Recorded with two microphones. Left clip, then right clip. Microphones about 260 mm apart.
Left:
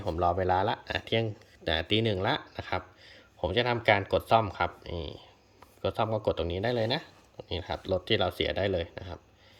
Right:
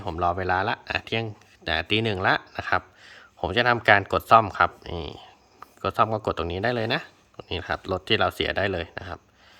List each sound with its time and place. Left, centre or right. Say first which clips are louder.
0.0 s speech: right 2 dB; centre